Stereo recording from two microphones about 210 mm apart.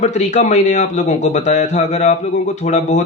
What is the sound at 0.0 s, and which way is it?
Speech, 30° left (ahead or behind).